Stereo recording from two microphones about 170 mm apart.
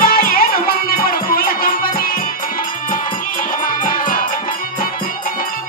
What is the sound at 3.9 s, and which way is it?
Music, 55° left (ahead or behind).